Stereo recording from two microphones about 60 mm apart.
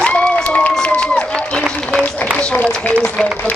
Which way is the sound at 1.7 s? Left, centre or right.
Centre.